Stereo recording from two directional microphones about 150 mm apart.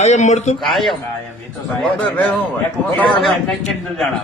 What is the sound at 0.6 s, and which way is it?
A man's voice, centre (ahead or behind).